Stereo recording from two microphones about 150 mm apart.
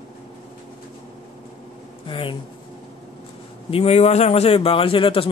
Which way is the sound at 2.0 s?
35° left (ahead or behind).